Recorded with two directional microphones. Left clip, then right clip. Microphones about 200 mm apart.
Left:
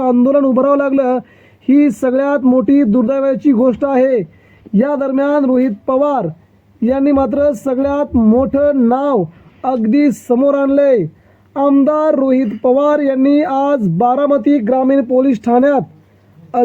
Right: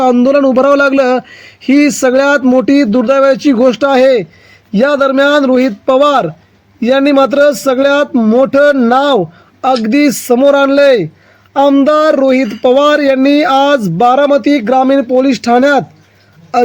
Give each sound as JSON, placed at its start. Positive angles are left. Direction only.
{"t": 0.0, "sound": "speech", "side_deg": -25}